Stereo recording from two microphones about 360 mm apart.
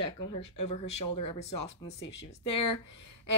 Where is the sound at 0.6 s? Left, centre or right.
Centre.